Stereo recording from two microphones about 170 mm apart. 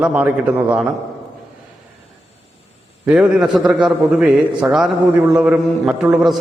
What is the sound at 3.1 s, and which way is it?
A man's voice, 5° right (ahead or behind).